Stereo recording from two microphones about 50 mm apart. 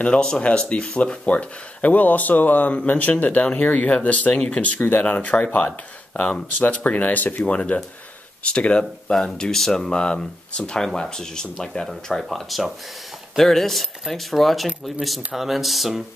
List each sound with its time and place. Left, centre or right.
0.0 s speech: centre; by 5.0 s left
5.0 s speech: left; by 11.9 s centre
12.1 s speech: centre